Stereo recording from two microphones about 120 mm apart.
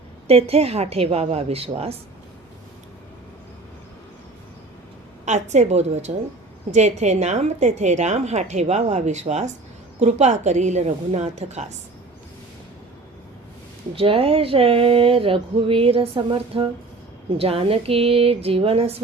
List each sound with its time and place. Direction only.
0.3 s a woman's voice: 55° right (ahead or behind)
5.2 s a woman's voice: 75° right (ahead or behind)
13.9 s speech: 50° right (ahead or behind)